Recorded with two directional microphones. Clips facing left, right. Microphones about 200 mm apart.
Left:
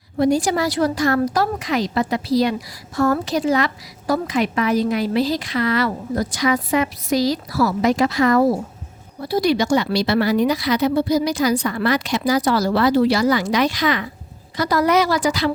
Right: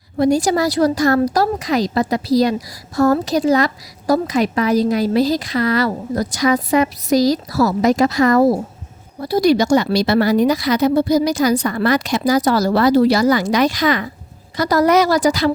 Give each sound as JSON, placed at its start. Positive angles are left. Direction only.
{"t": 0.2, "sound": "a woman's voice", "side_deg": -40}